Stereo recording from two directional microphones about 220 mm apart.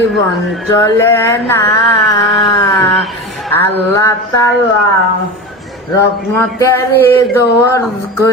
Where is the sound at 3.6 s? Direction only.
10° left (ahead or behind).